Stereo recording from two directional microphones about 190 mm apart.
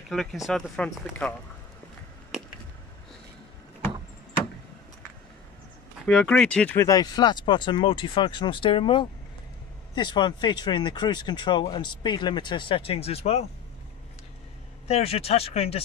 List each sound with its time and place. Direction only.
0.1 s speech: centre (ahead or behind)
6.0 s speech: 5° left (ahead or behind); by 13.5 s 30° left (ahead or behind)
14.9 s speech: 35° left (ahead or behind)